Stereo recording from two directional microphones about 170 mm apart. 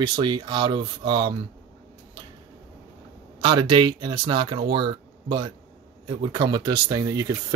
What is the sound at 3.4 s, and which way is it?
Speech, 30° right (ahead or behind).